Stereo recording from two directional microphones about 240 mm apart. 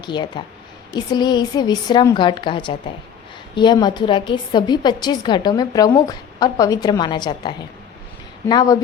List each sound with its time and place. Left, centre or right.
0.0 s a woman's voice: centre